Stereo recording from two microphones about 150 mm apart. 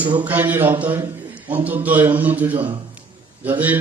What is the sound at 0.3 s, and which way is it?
A man's voice, 10° right (ahead or behind).